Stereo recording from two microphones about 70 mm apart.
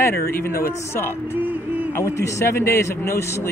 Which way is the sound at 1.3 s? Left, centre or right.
Right.